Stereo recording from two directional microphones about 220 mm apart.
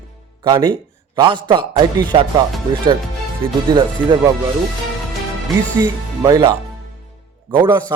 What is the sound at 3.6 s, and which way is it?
Speech, 20° right (ahead or behind).